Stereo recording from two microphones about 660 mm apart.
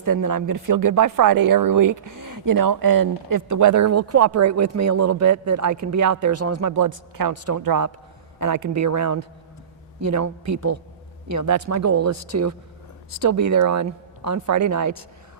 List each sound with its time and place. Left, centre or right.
0.0 s speech: right